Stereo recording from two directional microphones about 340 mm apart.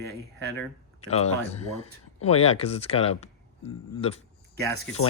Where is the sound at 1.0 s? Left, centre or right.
Centre.